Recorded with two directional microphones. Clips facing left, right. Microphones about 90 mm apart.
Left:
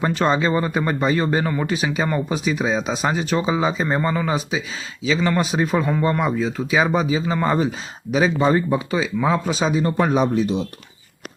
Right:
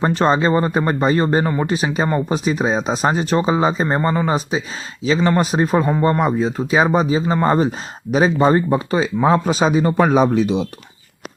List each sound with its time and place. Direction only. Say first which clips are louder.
0.0 s speech: right 3 dB; 35° right (ahead or behind); by 9.8 s 50° right (ahead or behind)
9.8 s speech: right 3 dB; 90° right